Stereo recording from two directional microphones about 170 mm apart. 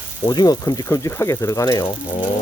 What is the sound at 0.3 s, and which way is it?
Speech, 25° left (ahead or behind).